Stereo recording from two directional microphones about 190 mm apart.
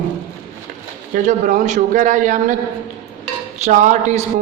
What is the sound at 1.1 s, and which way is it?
A man's voice, 40° right (ahead or behind).